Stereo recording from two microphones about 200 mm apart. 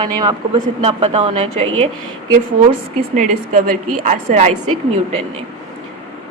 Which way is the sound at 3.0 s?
40° right (ahead or behind).